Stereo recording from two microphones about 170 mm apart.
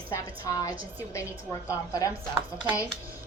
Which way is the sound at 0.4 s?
20° left (ahead or behind).